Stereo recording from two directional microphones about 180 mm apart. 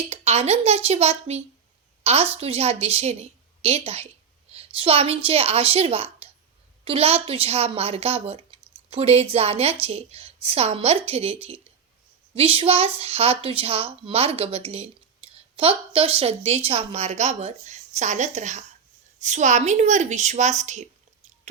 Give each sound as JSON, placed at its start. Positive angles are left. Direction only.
{"t": 0.1, "sound": "speech", "side_deg": -35}